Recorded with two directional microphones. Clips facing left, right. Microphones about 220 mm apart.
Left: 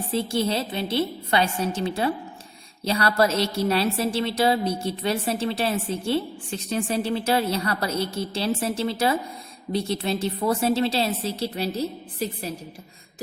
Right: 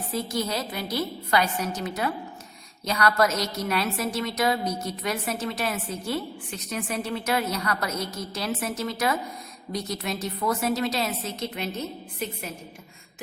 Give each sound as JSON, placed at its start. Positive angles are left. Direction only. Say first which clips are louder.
{"t": 0.1, "sound": "a woman's voice", "louder": "left 4 dB", "side_deg": 30}